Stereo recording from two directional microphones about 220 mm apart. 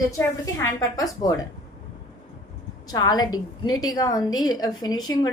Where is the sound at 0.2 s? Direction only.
15° left (ahead or behind).